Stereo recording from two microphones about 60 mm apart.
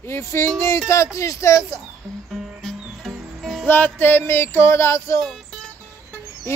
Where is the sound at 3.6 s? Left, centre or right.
Left.